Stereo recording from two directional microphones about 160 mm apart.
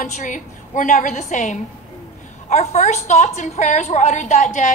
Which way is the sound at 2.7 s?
45° left (ahead or behind).